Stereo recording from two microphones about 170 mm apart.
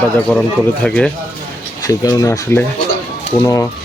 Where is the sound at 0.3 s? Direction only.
5° left (ahead or behind).